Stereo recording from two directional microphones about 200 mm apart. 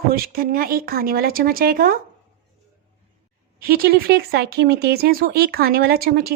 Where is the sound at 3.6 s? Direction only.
50° right (ahead or behind).